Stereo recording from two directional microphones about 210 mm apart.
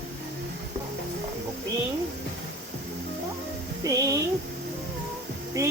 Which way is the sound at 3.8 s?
15° right (ahead or behind).